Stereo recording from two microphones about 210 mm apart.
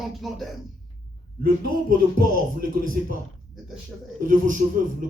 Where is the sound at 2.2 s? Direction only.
40° right (ahead or behind).